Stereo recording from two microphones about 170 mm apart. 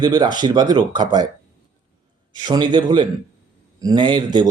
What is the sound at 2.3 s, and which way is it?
Speech, 25° right (ahead or behind).